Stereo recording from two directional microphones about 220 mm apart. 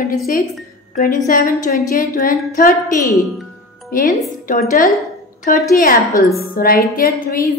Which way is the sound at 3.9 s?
40° left (ahead or behind).